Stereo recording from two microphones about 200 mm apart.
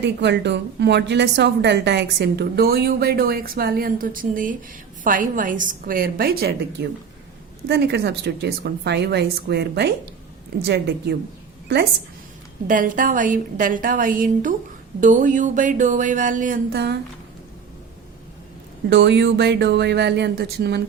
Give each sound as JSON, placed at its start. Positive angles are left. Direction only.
{"t": 0.0, "sound": "a woman's voice", "side_deg": -60}
{"t": 12.6, "sound": "a sound", "side_deg": -40}
{"t": 18.9, "sound": "a woman's voice", "side_deg": -60}